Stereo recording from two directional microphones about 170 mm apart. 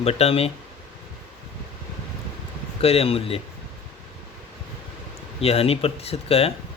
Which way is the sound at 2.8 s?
35° left (ahead or behind).